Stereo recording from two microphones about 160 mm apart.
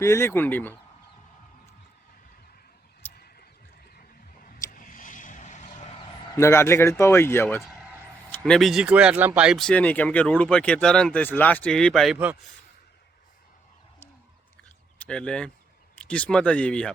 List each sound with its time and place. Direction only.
0.0 s speech: 15° left (ahead or behind)
4.7 s vehicle: 60° left (ahead or behind)
6.3 s speech: 15° left (ahead or behind)
8.3 s speech: 5° left (ahead or behind)
14.9 s speech: 5° left (ahead or behind)